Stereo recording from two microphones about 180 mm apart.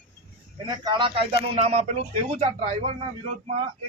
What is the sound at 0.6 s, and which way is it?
Speech, 25° right (ahead or behind).